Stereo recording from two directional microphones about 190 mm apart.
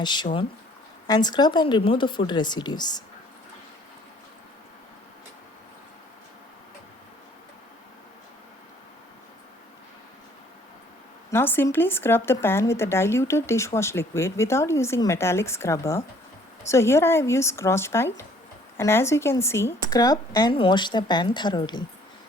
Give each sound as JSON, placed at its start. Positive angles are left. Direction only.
{"t": 0.0, "sound": "speech", "side_deg": 25}
{"t": 11.3, "sound": "speech", "side_deg": 10}